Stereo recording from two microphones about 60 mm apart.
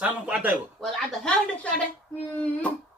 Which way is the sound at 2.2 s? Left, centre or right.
Left.